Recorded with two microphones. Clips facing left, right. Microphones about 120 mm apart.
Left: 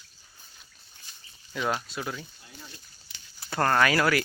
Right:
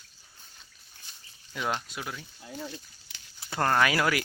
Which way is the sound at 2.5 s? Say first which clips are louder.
Right 10 dB; 90° right.